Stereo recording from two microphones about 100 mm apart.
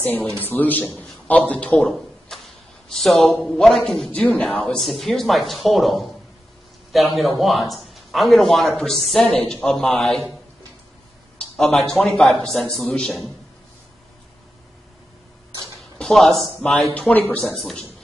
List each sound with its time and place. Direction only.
0.0 s a man's voice: 20° left (ahead or behind)
1.9 s a sound: centre (ahead or behind)
3.4 s speech: centre (ahead or behind)
4.1 s a man's voice: 15° left (ahead or behind)
11.3 s speech: 5° left (ahead or behind)
16.0 s a man's voice: centre (ahead or behind)